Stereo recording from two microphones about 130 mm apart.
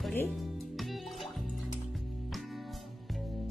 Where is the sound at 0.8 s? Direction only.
Centre (ahead or behind).